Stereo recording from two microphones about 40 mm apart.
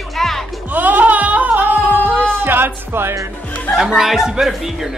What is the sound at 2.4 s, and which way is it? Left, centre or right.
Music, right.